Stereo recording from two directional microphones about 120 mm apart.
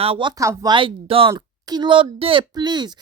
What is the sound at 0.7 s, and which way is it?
Speech, 45° right (ahead or behind).